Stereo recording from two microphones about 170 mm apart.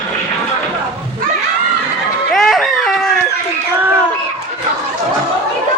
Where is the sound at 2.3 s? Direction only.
Centre (ahead or behind).